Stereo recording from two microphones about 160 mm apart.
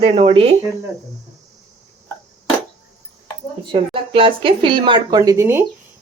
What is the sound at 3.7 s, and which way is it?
Speech, 35° right (ahead or behind).